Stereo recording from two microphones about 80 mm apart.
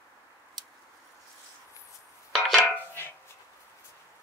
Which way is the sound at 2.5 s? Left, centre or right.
Centre.